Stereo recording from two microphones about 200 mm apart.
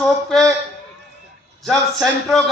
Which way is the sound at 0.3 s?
Centre (ahead or behind).